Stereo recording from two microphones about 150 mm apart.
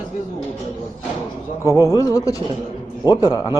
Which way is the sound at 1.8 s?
25° left (ahead or behind).